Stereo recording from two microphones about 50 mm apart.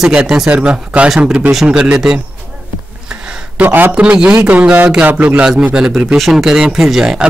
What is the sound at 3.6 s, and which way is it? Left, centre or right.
Speech, right.